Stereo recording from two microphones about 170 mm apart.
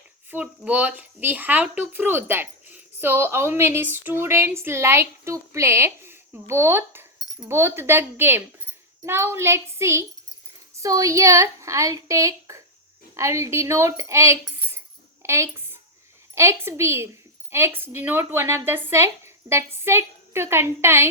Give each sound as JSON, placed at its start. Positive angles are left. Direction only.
{"t": 0.3, "sound": "a woman's voice", "side_deg": -10}